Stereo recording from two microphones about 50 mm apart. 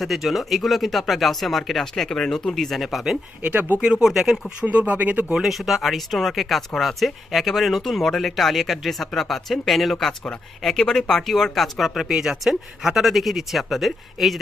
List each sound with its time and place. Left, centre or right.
0.0 s speech: centre
3.4 s speech: right
3.8 s speech: centre
4.6 s speech: right
5.3 s speech: centre
12.0 s speech: centre